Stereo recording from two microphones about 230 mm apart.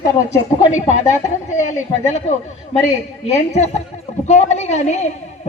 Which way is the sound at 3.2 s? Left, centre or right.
Left.